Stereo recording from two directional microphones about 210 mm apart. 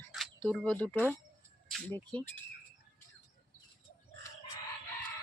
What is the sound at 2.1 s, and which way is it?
Speech, 5° left (ahead or behind).